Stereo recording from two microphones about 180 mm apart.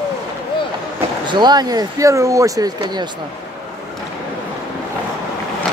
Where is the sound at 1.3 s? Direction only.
25° right (ahead or behind).